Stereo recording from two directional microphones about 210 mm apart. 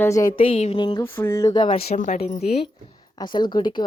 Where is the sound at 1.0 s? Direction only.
10° left (ahead or behind); by 2.4 s 35° left (ahead or behind).